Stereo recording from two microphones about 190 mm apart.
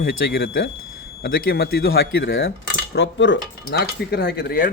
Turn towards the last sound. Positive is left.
turn(degrees=50)  # may be behind; listen again after turning